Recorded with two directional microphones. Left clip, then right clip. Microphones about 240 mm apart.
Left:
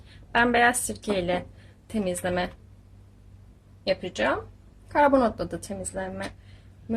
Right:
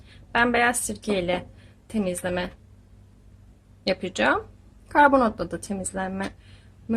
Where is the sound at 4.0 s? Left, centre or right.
Right.